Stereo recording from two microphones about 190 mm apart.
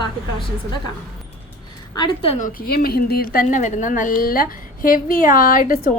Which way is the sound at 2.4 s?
55° left (ahead or behind).